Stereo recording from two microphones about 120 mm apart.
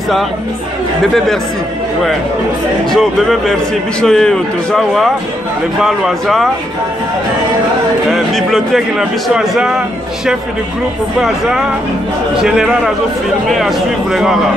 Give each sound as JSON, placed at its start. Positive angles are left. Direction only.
{"t": 2.9, "sound": "a man's voice", "side_deg": 5}
{"t": 8.1, "sound": "a man's voice", "side_deg": 0}
{"t": 11.1, "sound": "a man's voice", "side_deg": -5}